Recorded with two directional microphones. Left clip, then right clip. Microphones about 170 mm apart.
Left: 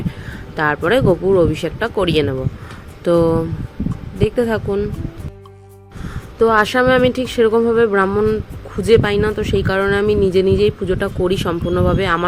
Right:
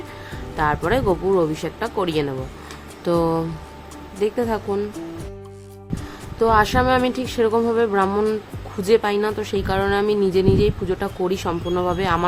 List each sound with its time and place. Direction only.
0.5 s speech: 20° left (ahead or behind)
6.4 s speech: 20° left (ahead or behind)